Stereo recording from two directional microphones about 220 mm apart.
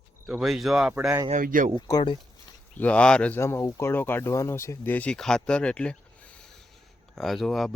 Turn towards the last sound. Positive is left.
turn(degrees=0)  # may be behind; listen again after turning